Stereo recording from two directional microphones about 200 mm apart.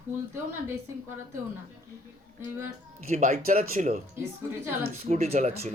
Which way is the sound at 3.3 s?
45° right (ahead or behind).